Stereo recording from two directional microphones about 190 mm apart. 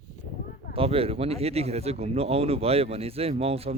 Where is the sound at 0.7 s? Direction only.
30° right (ahead or behind).